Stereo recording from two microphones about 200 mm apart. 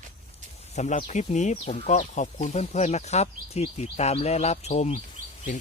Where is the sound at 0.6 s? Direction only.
35° left (ahead or behind).